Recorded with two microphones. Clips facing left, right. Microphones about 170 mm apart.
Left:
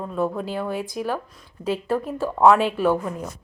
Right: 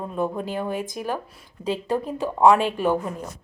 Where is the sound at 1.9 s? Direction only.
20° right (ahead or behind).